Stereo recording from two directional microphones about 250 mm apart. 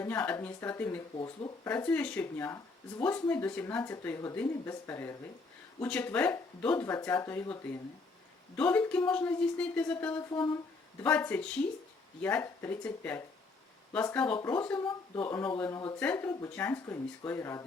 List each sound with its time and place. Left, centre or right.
0.0 s speech: centre
10.3 s speech: centre
11.0 s speech: centre
14.3 s speech: centre